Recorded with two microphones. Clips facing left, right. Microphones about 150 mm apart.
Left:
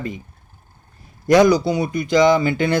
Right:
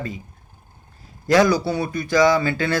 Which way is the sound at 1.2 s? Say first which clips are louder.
Left 3 dB; 20° left (ahead or behind).